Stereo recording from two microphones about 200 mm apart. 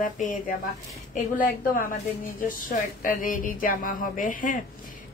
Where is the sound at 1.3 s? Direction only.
45° left (ahead or behind).